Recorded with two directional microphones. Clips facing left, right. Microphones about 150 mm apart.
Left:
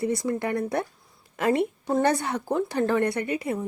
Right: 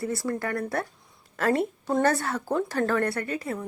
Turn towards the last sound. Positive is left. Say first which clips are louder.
# left 3 dB
turn(degrees=20)  # may be behind; listen again after turning